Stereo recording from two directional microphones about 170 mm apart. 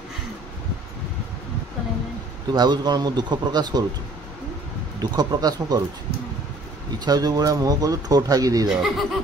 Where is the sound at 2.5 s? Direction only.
25° right (ahead or behind).